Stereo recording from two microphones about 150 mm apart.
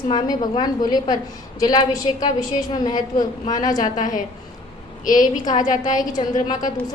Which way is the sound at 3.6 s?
60° left (ahead or behind).